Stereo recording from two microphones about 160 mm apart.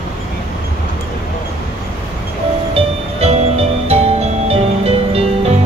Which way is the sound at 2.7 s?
40° right (ahead or behind).